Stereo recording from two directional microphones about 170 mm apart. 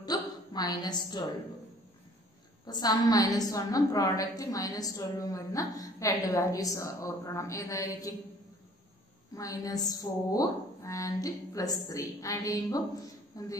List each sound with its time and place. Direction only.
0.0 s a sound: 25° left (ahead or behind)
2.6 s a woman's voice: 25° left (ahead or behind)
9.3 s a woman's voice: 20° left (ahead or behind)